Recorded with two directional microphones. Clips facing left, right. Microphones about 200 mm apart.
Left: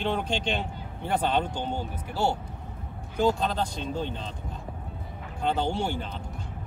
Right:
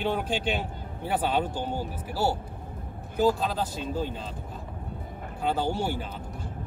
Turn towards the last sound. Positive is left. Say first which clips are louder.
# even
turn(degrees=-5)  # may be behind; listen again after turning